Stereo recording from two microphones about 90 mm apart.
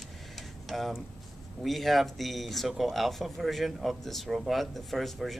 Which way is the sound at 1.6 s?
Centre (ahead or behind).